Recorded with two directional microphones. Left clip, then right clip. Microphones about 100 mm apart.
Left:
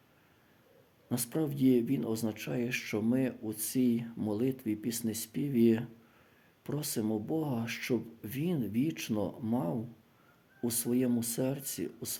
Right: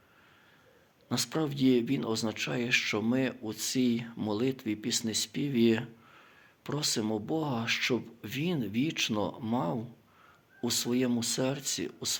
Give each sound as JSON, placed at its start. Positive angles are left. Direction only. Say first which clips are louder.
{"t": 1.1, "sound": "speech", "louder": "right 3 dB", "side_deg": 40}